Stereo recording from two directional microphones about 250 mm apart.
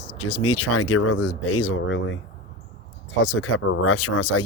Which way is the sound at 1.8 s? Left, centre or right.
Left.